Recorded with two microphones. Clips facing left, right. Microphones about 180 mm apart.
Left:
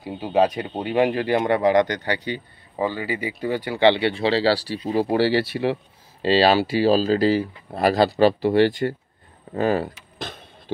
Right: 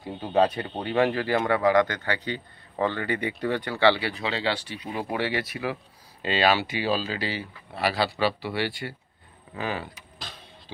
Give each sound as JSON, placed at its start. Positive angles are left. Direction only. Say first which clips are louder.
{"t": 0.0, "sound": "speech", "louder": "left 3 dB", "side_deg": 10}
{"t": 9.5, "sound": "vehicle", "louder": "left 10 dB", "side_deg": 45}